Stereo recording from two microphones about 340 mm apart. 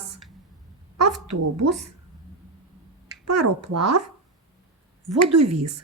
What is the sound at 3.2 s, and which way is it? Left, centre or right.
Speech, right.